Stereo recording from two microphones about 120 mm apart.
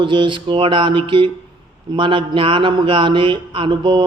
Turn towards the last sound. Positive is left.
turn(degrees=-40)  # may be behind; listen again after turning